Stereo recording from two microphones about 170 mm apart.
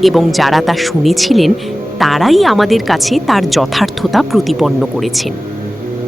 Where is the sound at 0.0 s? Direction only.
Centre (ahead or behind).